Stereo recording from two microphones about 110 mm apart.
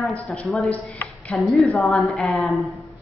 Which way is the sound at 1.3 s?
Centre (ahead or behind).